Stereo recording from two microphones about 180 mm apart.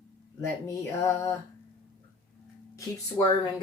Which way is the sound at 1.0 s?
15° left (ahead or behind).